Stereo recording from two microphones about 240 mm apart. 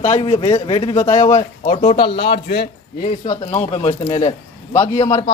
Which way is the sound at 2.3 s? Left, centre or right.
Left.